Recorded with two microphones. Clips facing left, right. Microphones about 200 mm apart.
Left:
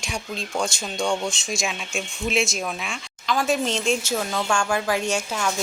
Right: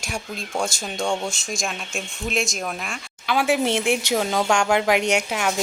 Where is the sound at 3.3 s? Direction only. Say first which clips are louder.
Right 2 dB; 10° right (ahead or behind).